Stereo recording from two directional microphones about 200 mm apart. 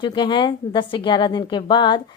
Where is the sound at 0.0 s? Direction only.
20° left (ahead or behind).